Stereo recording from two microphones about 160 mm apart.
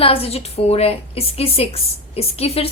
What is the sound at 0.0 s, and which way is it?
A woman's voice, 35° left (ahead or behind).